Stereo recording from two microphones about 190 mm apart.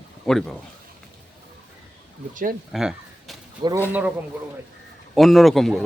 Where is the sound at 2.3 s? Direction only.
45° right (ahead or behind).